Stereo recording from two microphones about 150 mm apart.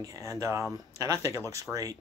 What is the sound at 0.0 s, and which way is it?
Speech, 20° right (ahead or behind).